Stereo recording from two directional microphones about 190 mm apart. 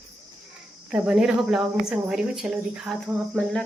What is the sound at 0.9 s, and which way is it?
Speech, 5° right (ahead or behind).